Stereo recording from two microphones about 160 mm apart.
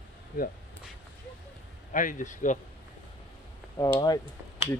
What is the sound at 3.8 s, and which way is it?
Speech, 25° left (ahead or behind).